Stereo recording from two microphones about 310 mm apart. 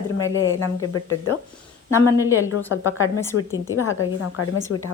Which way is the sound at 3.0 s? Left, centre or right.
Left.